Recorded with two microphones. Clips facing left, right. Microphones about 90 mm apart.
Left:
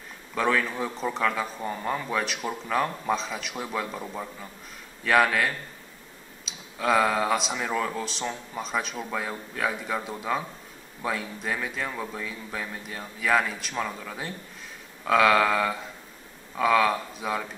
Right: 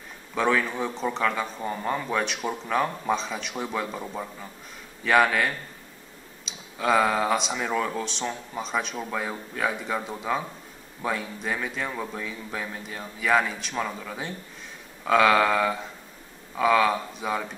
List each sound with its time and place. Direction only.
0.3 s a man's voice: centre (ahead or behind)